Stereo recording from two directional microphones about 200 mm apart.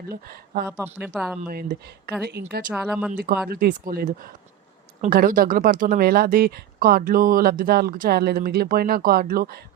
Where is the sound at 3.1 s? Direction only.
45° right (ahead or behind).